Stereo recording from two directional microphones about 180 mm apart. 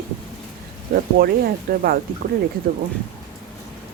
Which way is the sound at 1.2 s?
55° right (ahead or behind).